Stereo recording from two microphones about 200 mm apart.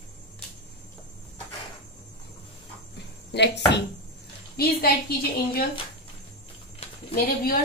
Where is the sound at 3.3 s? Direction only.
60° left (ahead or behind).